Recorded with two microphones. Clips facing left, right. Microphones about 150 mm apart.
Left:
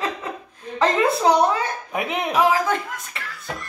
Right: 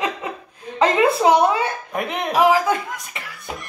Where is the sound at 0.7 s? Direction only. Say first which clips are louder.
Right 3 dB; 15° right (ahead or behind).